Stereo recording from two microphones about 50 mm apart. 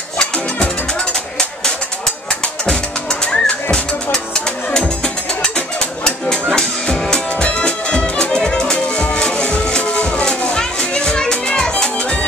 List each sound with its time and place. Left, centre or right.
2.4 s music: centre
8.8 s music: left
9.2 s music: centre